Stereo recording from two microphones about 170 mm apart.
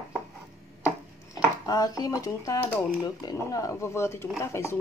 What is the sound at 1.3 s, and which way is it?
Speech, 20° left (ahead or behind).